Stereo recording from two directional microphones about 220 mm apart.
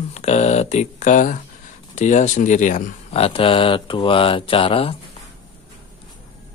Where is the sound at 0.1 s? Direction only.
30° left (ahead or behind).